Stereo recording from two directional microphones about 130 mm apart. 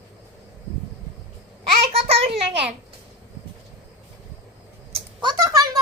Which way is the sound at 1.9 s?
50° right (ahead or behind).